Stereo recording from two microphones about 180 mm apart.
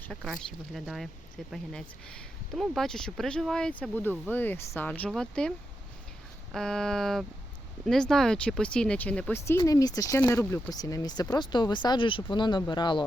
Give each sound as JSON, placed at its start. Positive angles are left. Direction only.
{"t": 0.0, "sound": "speech", "side_deg": 0}